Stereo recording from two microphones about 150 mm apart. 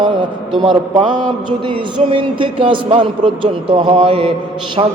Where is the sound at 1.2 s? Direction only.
35° right (ahead or behind).